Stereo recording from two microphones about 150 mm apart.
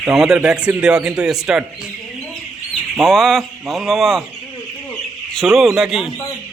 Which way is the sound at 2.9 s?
Centre (ahead or behind).